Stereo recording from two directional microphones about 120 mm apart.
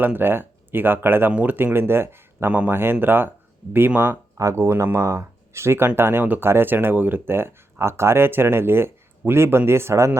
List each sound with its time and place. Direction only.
0.0 s speech: 15° right (ahead or behind)